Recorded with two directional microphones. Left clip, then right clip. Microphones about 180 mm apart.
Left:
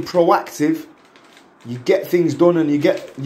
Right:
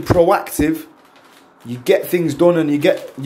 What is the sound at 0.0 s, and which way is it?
Speech, 30° right (ahead or behind).